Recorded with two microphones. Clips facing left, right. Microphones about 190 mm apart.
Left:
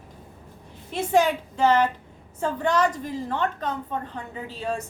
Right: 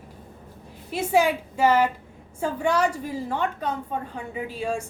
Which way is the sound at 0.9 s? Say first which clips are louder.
Even; 10° right (ahead or behind).